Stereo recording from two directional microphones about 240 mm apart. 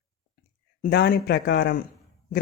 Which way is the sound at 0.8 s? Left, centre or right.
Left.